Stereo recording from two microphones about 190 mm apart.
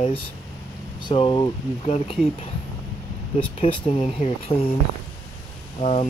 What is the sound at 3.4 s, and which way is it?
Speech, 30° left (ahead or behind).